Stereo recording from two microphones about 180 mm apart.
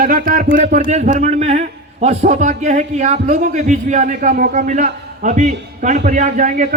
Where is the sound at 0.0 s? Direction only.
50° right (ahead or behind).